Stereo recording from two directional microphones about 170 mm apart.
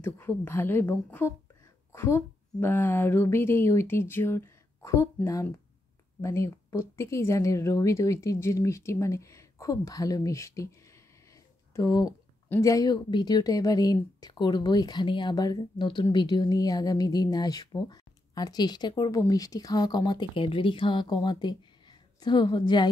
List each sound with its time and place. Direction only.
0.0 s a woman's voice: 10° left (ahead or behind)